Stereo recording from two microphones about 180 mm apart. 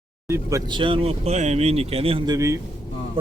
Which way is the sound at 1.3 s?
35° right (ahead or behind).